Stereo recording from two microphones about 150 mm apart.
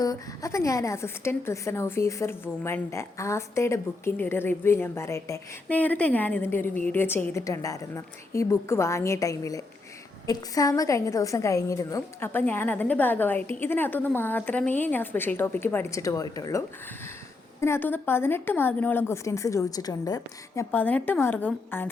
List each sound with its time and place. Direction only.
0.0 s a woman's voice: 25° left (ahead or behind)
20.7 s a woman's voice: 10° left (ahead or behind)